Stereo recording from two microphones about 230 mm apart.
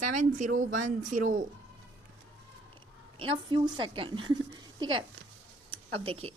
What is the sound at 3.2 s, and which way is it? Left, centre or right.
Speech, right.